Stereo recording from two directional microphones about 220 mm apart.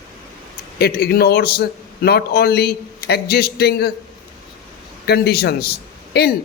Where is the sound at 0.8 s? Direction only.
45° left (ahead or behind).